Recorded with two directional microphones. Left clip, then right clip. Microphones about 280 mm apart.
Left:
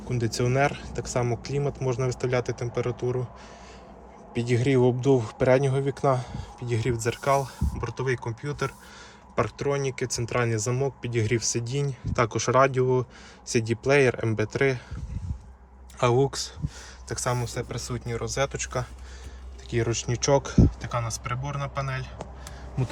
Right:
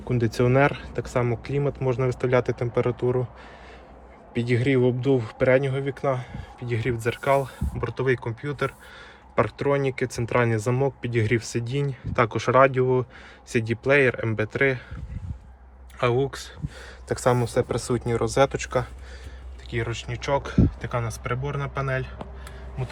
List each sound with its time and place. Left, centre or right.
0.1 s speech: centre
4.4 s speech: centre
16.0 s speech: centre
17.1 s speech: centre
19.7 s speech: left; by 22.0 s centre